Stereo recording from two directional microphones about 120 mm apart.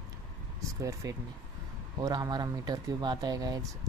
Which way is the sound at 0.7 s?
25° right (ahead or behind).